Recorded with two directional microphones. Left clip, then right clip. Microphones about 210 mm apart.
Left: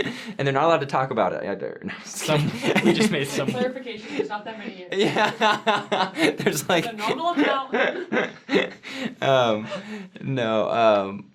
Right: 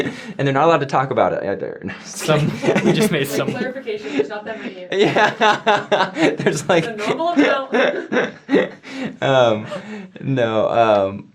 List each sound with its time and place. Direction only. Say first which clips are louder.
0.0 s speech: right 4 dB; 25° right (ahead or behind)
2.6 s speech: right 4 dB; 30° right (ahead or behind)
2.9 s speech: right 4 dB; 40° left (ahead or behind)
3.4 s speech: right 1 dB; 40° right (ahead or behind)
4.9 s speech: right 6 dB; 60° right (ahead or behind); by 11.1 s 30° right (ahead or behind)